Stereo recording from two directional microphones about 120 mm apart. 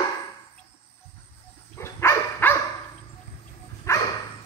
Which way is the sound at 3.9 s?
25° left (ahead or behind).